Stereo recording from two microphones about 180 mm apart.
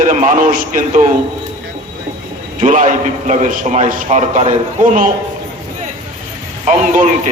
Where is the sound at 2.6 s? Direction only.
45° right (ahead or behind).